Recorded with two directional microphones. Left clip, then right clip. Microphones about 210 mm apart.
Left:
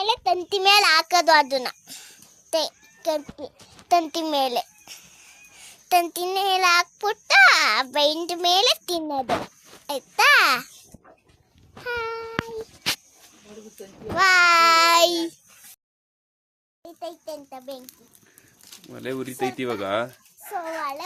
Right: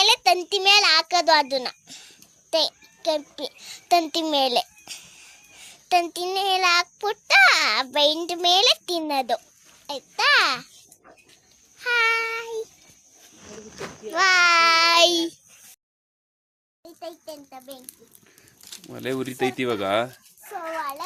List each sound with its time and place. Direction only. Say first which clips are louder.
0.0 s a child's voice: right 4 dB; 5° right (ahead or behind)
5.5 s child singing: left 1 dB; centre (ahead or behind)
9.8 s a child's voice: left 3 dB; 15° left (ahead or behind)
11.9 s child singing: right 8 dB; 10° left (ahead or behind)
14.2 s child singing: left 1 dB; centre (ahead or behind)
16.8 s a child's voice: left 2 dB; 25° left (ahead or behind)
18.9 s speech: right 2 dB; 10° right (ahead or behind)